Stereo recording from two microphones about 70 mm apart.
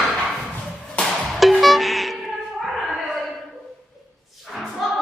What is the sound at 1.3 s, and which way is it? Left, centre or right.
Music, centre.